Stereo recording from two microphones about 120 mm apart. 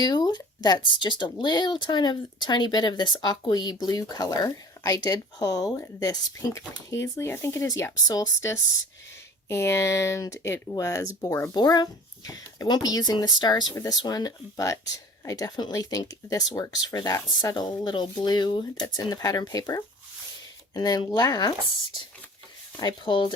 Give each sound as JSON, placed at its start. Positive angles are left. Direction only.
{"t": 0.0, "sound": "speech", "side_deg": 35}
{"t": 11.5, "sound": "speech", "side_deg": 35}
{"t": 22.8, "sound": "speech", "side_deg": 40}